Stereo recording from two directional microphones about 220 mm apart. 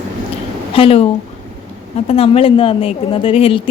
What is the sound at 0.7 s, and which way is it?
Speech, 25° left (ahead or behind).